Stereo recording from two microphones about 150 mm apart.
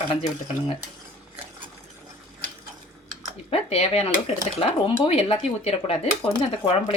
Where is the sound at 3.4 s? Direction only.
45° left (ahead or behind).